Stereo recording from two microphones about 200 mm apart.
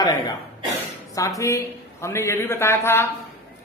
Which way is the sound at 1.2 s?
15° left (ahead or behind).